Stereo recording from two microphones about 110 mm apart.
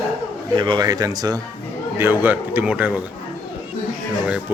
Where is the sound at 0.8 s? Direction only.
35° right (ahead or behind).